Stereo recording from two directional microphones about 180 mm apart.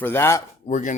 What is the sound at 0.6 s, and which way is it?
Speech, 45° left (ahead or behind).